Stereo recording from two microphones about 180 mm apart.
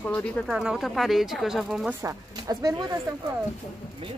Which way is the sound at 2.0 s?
20° right (ahead or behind).